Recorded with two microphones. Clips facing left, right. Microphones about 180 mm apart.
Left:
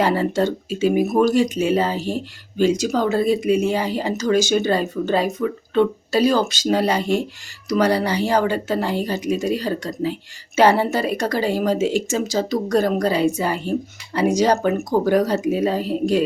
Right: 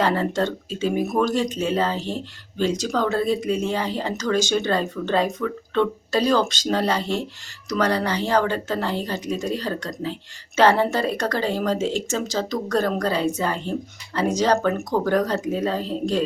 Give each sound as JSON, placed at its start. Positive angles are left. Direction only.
{"t": 0.0, "sound": "speech", "side_deg": 10}